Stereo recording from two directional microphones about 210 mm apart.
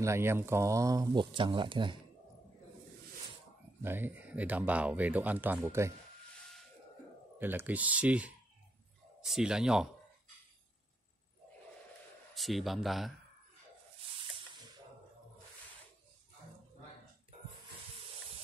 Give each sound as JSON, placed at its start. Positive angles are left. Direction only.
{"t": 0.0, "sound": "speech", "side_deg": -10}
{"t": 3.8, "sound": "speech", "side_deg": -10}
{"t": 7.3, "sound": "a man's voice", "side_deg": -10}
{"t": 12.4, "sound": "a man's voice", "side_deg": 0}